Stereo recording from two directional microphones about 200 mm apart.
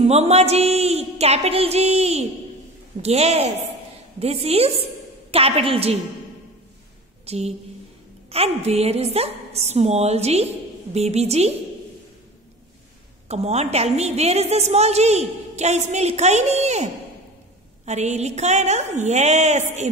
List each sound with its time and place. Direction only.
0.0 s a woman's voice: 30° right (ahead or behind)
7.2 s a woman's voice: 30° right (ahead or behind)
13.3 s a woman's voice: 35° right (ahead or behind)